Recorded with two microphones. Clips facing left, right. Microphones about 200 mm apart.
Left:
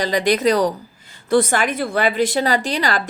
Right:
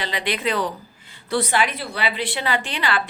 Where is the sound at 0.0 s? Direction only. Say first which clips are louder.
Left 8 dB; 40° left (ahead or behind).